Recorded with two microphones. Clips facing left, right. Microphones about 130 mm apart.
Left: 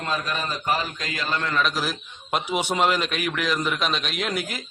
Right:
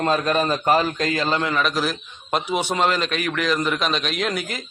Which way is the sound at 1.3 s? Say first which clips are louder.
Right 4 dB; 15° right (ahead or behind).